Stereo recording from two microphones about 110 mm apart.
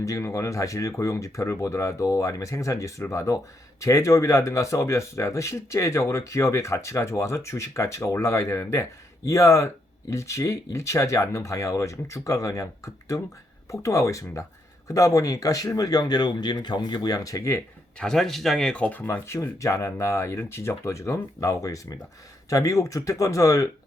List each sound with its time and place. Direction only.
0.0 s speech: 30° left (ahead or behind)
18.0 s speech: 5° left (ahead or behind); by 23.6 s 30° left (ahead or behind)